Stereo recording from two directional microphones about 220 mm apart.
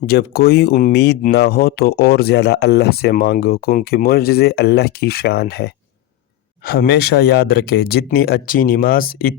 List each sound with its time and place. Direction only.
0.0 s speech: 45° left (ahead or behind)